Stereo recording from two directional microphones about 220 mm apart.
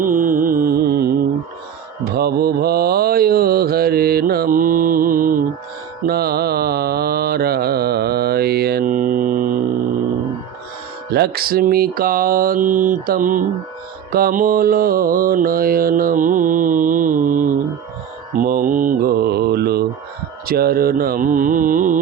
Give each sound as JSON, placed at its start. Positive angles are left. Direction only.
{"t": 0.0, "sound": "music", "side_deg": -35}
{"t": 2.1, "sound": "mantra", "side_deg": -45}
{"t": 11.1, "sound": "mantra", "side_deg": -45}